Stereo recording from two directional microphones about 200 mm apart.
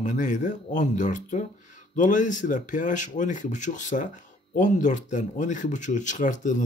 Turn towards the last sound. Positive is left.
turn(degrees=40)  # may be behind; listen again after turning